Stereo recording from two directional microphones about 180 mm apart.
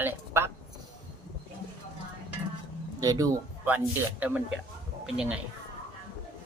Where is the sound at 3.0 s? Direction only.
20° right (ahead or behind).